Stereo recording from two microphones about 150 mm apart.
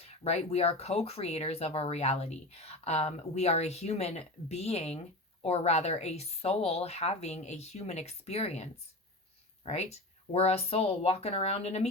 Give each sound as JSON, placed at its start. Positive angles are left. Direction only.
{"t": 0.0, "sound": "speech", "side_deg": 45}